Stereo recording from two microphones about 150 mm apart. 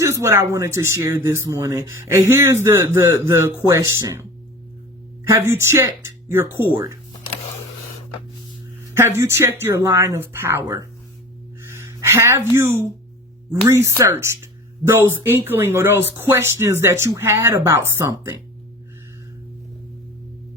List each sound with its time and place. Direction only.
0.0 s speech: 20° right (ahead or behind)
5.3 s speech: 15° right (ahead or behind)
9.0 s speech: 15° right (ahead or behind)
11.9 s speech: 20° right (ahead or behind)